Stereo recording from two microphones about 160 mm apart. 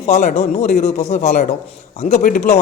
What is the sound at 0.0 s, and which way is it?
A man's voice, 45° left (ahead or behind).